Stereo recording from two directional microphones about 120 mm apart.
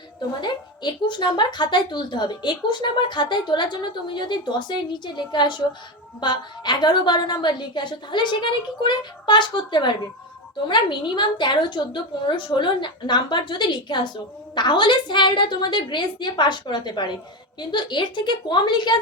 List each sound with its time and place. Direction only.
0.4 s speech: 40° left (ahead or behind)